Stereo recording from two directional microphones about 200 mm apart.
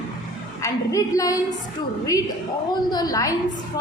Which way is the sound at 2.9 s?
20° left (ahead or behind).